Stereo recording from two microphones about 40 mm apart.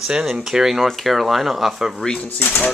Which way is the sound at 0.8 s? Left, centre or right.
Centre.